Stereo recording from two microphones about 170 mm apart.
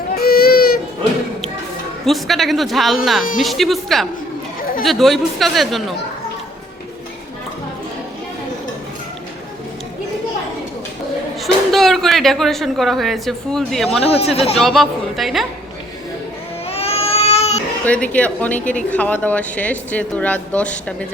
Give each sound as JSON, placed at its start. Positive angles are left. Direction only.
{"t": 0.2, "sound": "baby cry", "side_deg": 60}
{"t": 2.0, "sound": "speech", "side_deg": 0}
{"t": 11.3, "sound": "speech", "side_deg": 0}
{"t": 16.6, "sound": "baby cry", "side_deg": 35}
{"t": 17.8, "sound": "speech", "side_deg": 5}